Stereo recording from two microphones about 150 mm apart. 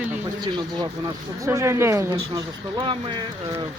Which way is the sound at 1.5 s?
20° right (ahead or behind).